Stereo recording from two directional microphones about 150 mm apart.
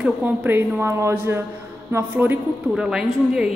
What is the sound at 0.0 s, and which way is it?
A woman's voice, 10° right (ahead or behind).